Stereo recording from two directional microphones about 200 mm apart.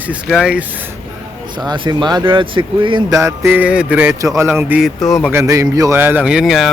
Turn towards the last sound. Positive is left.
turn(degrees=0)  # may be behind; listen again after turning